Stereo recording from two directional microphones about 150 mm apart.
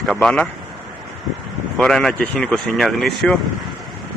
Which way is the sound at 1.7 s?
5° left (ahead or behind).